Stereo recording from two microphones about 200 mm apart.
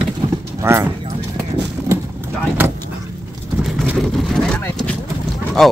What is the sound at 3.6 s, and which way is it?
Vehicle, 5° right (ahead or behind).